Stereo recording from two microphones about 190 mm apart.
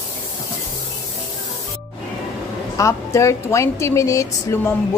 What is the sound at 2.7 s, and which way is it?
A woman's voice, 15° left (ahead or behind).